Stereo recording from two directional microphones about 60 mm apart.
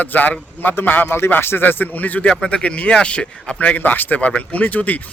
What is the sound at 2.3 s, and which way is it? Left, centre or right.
A man's voice, centre.